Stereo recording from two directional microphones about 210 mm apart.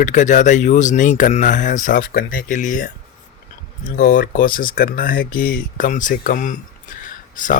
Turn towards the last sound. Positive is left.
turn(degrees=40)  # may be behind; listen again after turning